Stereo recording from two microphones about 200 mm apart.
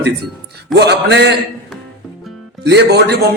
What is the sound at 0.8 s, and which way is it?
Speech, 55° right (ahead or behind).